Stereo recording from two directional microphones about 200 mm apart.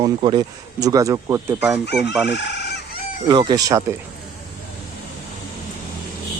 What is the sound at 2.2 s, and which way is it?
Chicken, 60° left (ahead or behind).